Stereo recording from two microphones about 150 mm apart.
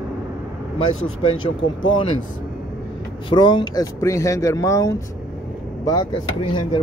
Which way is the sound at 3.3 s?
30° left (ahead or behind).